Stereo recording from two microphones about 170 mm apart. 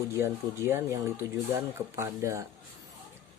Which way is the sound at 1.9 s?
15° right (ahead or behind).